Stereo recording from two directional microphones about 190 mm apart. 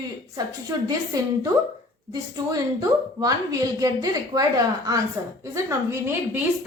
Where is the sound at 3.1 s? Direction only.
20° right (ahead or behind).